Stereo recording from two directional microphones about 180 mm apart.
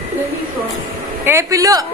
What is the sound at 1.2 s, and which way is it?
Speech, 15° right (ahead or behind).